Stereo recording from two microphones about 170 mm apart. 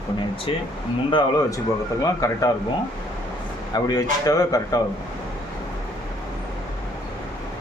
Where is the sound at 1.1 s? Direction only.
20° left (ahead or behind).